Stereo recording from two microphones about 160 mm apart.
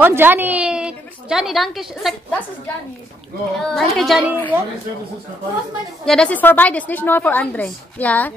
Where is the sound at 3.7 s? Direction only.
Centre (ahead or behind).